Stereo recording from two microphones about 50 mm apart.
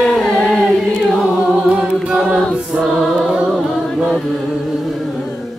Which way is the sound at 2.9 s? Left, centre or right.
Centre.